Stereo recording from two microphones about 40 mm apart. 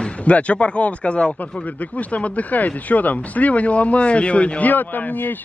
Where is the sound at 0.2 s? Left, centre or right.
Left.